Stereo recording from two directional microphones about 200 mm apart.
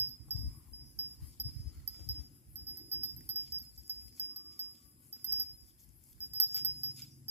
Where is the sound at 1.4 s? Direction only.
55° right (ahead or behind).